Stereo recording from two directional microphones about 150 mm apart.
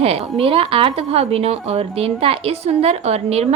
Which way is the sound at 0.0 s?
40° right (ahead or behind).